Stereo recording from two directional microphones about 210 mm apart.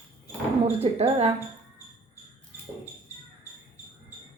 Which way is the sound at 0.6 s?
30° right (ahead or behind).